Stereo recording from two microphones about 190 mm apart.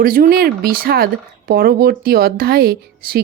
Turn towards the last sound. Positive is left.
turn(degrees=-55)  # may be behind; listen again after turning